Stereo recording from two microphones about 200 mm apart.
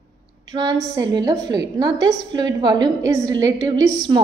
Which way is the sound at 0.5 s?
20° right (ahead or behind).